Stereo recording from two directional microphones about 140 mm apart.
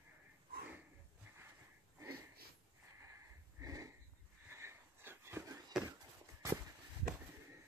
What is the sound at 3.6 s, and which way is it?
Sniff, 25° right (ahead or behind).